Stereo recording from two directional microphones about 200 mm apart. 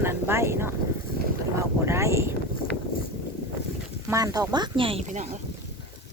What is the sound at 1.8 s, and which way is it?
Wind noise, 15° right (ahead or behind).